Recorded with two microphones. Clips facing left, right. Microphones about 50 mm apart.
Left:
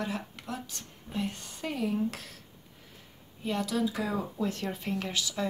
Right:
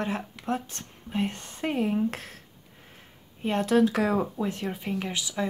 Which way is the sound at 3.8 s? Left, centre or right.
Right.